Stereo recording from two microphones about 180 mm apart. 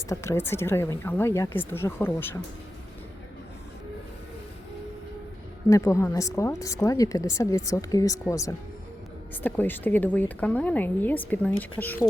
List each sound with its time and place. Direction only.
0.1 s speech: 15° left (ahead or behind)
5.6 s speech: 15° left (ahead or behind)